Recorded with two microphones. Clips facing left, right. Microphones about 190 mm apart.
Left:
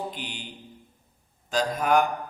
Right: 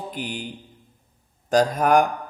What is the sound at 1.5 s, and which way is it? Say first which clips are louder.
Speech: right 5 dB; 50° right (ahead or behind).